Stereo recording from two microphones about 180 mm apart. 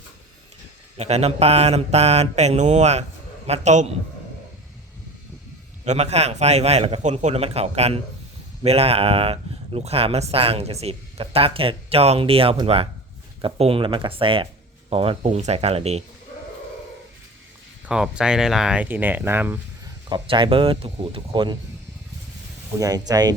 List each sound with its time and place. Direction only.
0.9 s speech: 35° right (ahead or behind)
5.8 s speech: 40° right (ahead or behind)
17.8 s speech: 5° right (ahead or behind)
20.1 s speech: 25° right (ahead or behind)
22.8 s speech: 20° right (ahead or behind)